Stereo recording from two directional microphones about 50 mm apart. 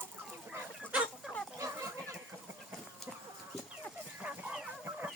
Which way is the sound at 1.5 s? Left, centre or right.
Right.